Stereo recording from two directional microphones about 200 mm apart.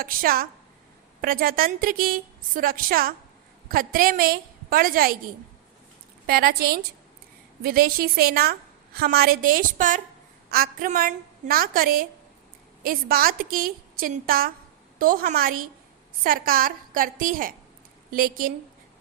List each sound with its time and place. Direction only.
0.0 s a woman's voice: 45° right (ahead or behind)